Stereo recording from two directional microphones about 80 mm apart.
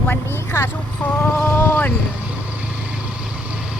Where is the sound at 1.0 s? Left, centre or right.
Centre.